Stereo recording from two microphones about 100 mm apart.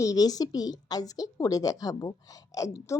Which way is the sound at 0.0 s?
40° left (ahead or behind).